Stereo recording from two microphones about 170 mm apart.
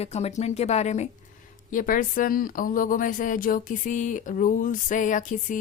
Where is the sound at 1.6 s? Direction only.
50° left (ahead or behind).